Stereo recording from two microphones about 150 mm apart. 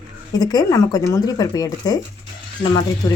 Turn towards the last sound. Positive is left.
turn(degrees=30)  # may be behind; listen again after turning